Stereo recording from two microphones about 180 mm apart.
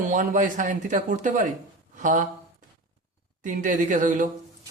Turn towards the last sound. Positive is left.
turn(degrees=-45)  # may be behind; listen again after turning